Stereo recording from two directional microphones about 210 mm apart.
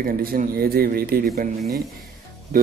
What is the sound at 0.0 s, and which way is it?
Speech, 45° right (ahead or behind).